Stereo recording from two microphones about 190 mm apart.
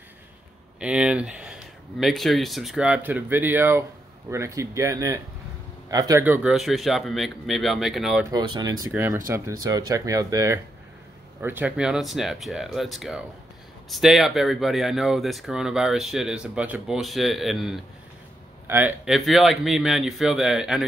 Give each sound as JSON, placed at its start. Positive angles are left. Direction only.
{"t": 0.7, "sound": "speech", "side_deg": -5}
{"t": 8.3, "sound": "speech", "side_deg": -20}